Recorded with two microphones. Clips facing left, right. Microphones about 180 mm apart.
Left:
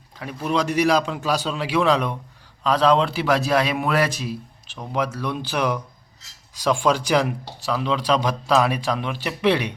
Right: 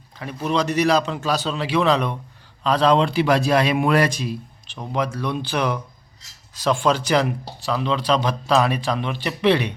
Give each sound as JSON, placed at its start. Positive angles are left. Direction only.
{"t": 0.2, "sound": "a man's voice", "side_deg": 5}